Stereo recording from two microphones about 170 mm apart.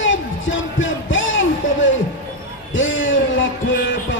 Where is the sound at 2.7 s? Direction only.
90° left.